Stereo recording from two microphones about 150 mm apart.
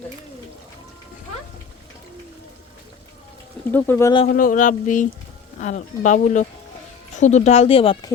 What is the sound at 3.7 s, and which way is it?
Speech, 15° left (ahead or behind).